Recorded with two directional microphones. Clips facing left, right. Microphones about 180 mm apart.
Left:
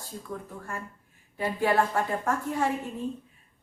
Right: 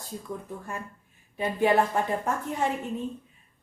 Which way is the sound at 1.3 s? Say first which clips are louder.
Right 2 dB; 20° right (ahead or behind).